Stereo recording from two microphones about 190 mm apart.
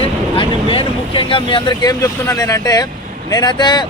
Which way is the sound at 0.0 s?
30° left (ahead or behind).